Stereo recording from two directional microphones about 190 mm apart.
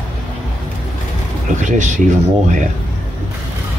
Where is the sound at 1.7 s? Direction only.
40° right (ahead or behind).